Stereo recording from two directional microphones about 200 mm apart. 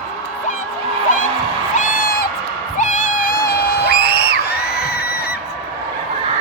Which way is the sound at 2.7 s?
40° left (ahead or behind).